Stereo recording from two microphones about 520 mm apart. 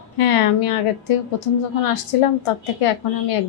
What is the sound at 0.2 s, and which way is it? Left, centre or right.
Speech, left.